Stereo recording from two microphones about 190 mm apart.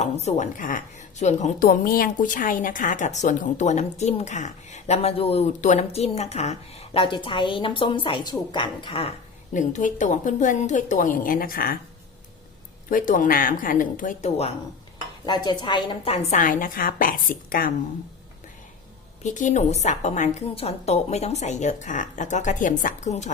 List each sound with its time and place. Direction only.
0.0 s speech: 35° left (ahead or behind)
9.5 s a woman's voice: 40° left (ahead or behind)
12.9 s a woman's voice: 45° left (ahead or behind)
15.3 s a woman's voice: 25° left (ahead or behind)
16.3 s a woman's voice: 45° left (ahead or behind)
19.2 s speech: 40° left (ahead or behind)